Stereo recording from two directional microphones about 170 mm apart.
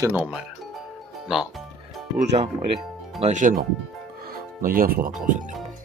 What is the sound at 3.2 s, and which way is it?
Speech, 50° right (ahead or behind).